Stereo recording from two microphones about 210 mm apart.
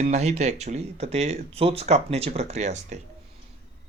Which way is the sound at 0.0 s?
35° right (ahead or behind).